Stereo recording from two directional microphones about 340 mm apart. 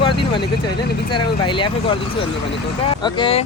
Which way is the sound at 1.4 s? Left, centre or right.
Centre.